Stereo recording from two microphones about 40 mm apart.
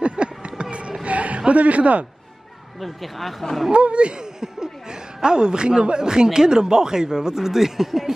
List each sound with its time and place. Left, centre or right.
0.0 s a sound: right
1.5 s speech: right
2.8 s speech: centre
3.7 s speech: right; by 8.1 s centre